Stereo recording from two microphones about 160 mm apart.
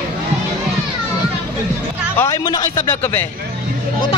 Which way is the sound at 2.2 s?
20° left (ahead or behind).